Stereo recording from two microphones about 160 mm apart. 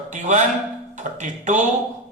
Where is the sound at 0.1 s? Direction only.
50° right (ahead or behind).